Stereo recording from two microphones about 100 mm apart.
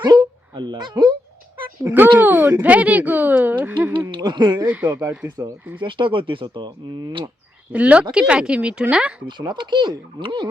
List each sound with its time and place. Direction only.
0.0 s a sound: 45° right (ahead or behind)
1.8 s speech: 20° right (ahead or behind)
4.1 s a sound: 50° right (ahead or behind)
4.7 s speech: 15° right (ahead or behind)
5.8 s speech: 55° right (ahead or behind)
7.7 s speech: 15° right (ahead or behind)
9.2 s speech: 50° right (ahead or behind)